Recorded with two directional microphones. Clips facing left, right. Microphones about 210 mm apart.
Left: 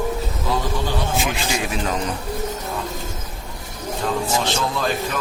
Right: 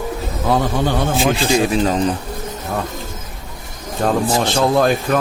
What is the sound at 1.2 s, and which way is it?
Music, 30° right (ahead or behind).